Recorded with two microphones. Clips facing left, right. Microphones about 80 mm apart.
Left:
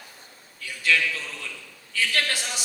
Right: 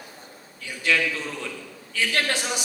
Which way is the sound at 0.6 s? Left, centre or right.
Centre.